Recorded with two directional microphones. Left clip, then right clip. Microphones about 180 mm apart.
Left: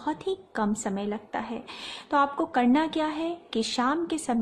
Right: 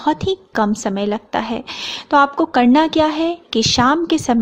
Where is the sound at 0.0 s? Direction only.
35° right (ahead or behind).